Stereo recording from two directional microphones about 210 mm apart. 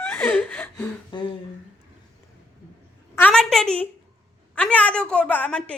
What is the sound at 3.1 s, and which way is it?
A woman's voice, 5° left (ahead or behind).